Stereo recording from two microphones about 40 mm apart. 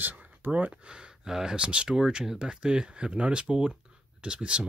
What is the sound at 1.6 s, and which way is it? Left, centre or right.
Speech, right.